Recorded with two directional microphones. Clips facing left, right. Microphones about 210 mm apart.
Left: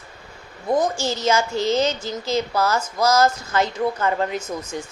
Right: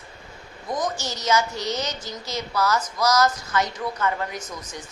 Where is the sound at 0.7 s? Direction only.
30° left (ahead or behind).